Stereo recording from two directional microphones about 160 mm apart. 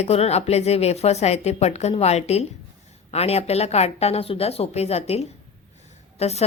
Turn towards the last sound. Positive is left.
turn(degrees=40)  # may be behind; listen again after turning